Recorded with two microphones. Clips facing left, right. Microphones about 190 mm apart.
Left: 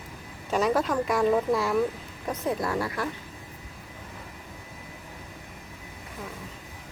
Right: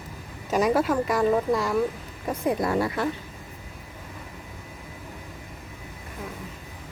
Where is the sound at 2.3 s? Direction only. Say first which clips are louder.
Right 3 dB; 20° right (ahead or behind).